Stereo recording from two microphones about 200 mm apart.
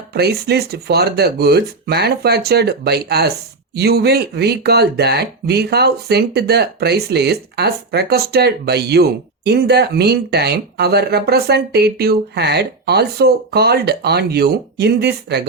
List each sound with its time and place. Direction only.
0.1 s speech: 55° right (ahead or behind)